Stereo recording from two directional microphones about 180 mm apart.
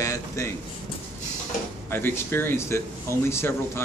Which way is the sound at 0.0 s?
15° left (ahead or behind).